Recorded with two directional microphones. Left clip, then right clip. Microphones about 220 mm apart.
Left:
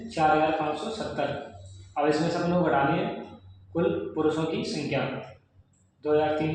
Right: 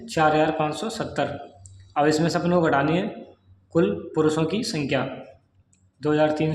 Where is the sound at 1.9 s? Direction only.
40° right (ahead or behind).